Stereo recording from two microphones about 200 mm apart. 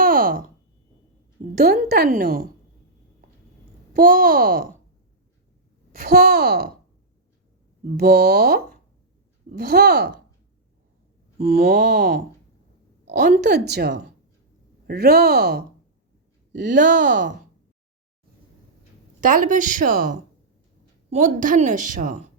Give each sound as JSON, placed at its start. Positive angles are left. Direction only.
{"t": 0.0, "sound": "a sound", "side_deg": -45}
{"t": 1.5, "sound": "a woman's voice", "side_deg": -55}
{"t": 3.9, "sound": "a woman's voice", "side_deg": -45}
{"t": 5.9, "sound": "a woman's voice", "side_deg": -50}
{"t": 7.9, "sound": "a woman's voice", "side_deg": -50}
{"t": 11.4, "sound": "a woman's voice", "side_deg": -50}
{"t": 13.1, "sound": "a woman's voice", "side_deg": -35}
{"t": 13.5, "sound": "a woman's voice", "side_deg": -55}
{"t": 16.7, "sound": "a woman's voice", "side_deg": -40}
{"t": 17.0, "sound": "speech", "side_deg": -65}
{"t": 19.2, "sound": "a woman's voice", "side_deg": -40}